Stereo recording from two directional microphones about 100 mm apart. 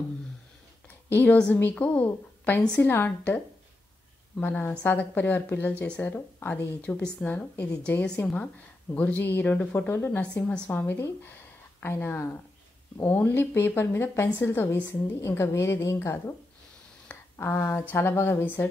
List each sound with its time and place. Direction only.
0.8 s a woman's voice: 20° left (ahead or behind)